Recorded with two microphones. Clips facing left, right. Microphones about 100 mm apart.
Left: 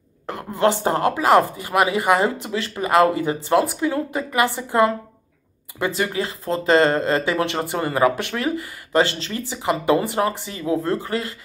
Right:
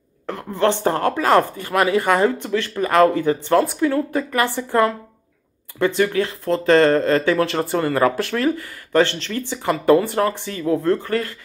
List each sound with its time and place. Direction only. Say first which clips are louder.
0.3 s a woman's voice: even; 15° left (ahead or behind)
5.8 s a woman's voice: right 5 dB; 20° left (ahead or behind)